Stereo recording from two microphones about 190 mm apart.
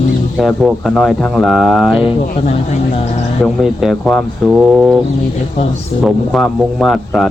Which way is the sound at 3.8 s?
Centre (ahead or behind).